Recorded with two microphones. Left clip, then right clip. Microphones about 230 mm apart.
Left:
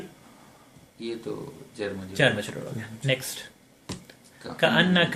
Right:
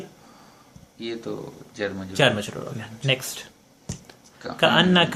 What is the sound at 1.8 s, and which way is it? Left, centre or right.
Speech, right.